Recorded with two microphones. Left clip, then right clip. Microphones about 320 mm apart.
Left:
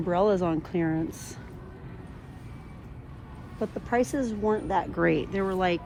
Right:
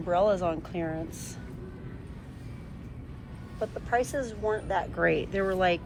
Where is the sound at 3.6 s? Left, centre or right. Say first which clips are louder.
Left 1 dB; centre.